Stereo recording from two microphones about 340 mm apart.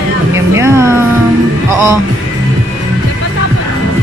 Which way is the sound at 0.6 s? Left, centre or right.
Centre.